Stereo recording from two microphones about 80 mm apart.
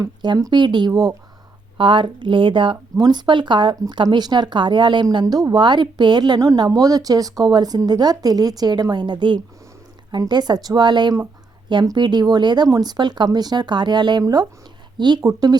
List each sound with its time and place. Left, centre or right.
0.0 s speech: right
1.8 s speech: right
3.0 s speech: right
5.2 s speech: right
6.6 s speech: right
12.6 s speech: right
15.2 s speech: right